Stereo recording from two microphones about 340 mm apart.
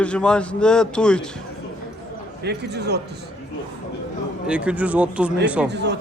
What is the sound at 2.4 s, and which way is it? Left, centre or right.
Speech, right.